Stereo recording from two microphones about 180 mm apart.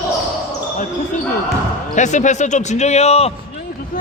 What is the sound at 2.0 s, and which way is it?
Speech, 40° left (ahead or behind).